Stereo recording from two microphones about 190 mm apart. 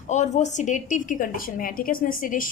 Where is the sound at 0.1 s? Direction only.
40° left (ahead or behind).